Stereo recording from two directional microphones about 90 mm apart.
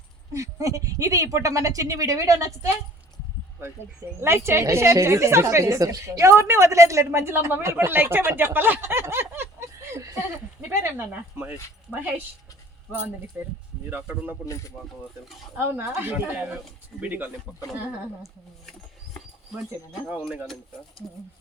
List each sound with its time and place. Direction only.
0.3 s a woman's voice: 35° right (ahead or behind)
4.2 s a woman's voice: 30° right (ahead or behind)
13.9 s speech: 20° right (ahead or behind)
14.4 s speech: 40° left (ahead or behind)
15.5 s speech: 25° right (ahead or behind)
20.1 s speech: 15° right (ahead or behind)